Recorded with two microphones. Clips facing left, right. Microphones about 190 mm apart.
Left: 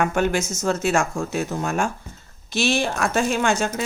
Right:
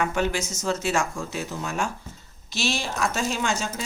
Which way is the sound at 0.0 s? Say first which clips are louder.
Left 4 dB; 50° left (ahead or behind).